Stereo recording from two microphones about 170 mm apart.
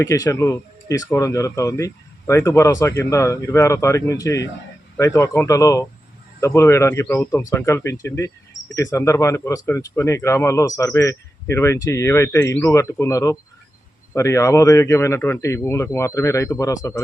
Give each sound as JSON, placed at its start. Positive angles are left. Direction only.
{"t": 0.0, "sound": "speech", "side_deg": 20}